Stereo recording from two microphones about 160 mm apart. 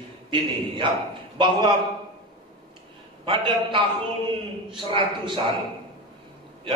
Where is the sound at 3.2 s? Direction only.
35° right (ahead or behind).